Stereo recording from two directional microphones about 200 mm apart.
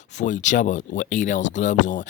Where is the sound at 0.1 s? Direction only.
40° left (ahead or behind).